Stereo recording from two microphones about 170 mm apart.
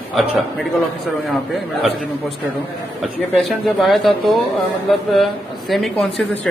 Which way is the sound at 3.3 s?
Centre (ahead or behind).